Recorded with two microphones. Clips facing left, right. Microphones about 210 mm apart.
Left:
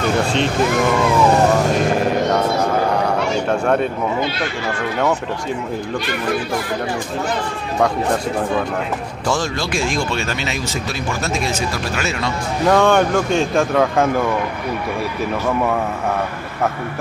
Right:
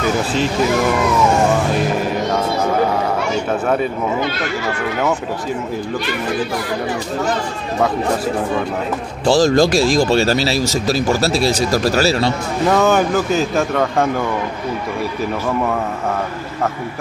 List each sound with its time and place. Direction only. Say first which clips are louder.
1.8 s music: left 1 dB; centre (ahead or behind)
3.4 s speech: left 1 dB; centre (ahead or behind)
9.2 s speech: right 10 dB; 35° right (ahead or behind)
12.6 s speech: even; 5° right (ahead or behind)